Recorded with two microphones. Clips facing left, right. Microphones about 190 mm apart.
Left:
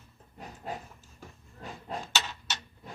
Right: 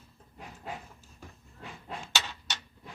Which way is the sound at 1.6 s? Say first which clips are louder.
Left 4 dB; 40° left (ahead or behind).